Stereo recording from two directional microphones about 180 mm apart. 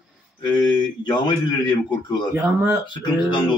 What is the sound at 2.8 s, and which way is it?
Speech, 25° left (ahead or behind).